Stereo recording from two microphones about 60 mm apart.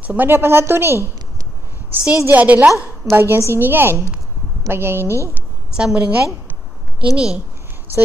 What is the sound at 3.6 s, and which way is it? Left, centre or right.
A woman's voice, right.